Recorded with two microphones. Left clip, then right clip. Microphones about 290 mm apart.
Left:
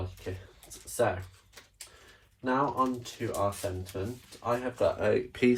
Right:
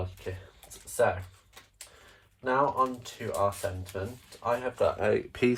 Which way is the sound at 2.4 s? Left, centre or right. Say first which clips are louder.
Right 2 dB; right.